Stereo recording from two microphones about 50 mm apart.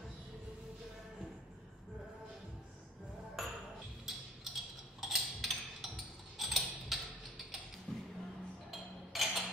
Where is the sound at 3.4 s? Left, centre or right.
Centre.